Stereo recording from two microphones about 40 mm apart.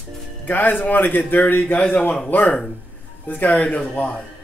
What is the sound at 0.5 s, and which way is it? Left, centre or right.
A man's voice, left.